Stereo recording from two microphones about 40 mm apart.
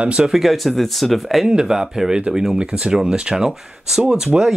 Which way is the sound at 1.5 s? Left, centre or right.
Centre.